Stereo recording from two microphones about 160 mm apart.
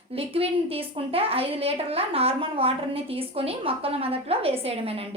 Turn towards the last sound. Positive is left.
turn(degrees=-40)  # may be behind; listen again after turning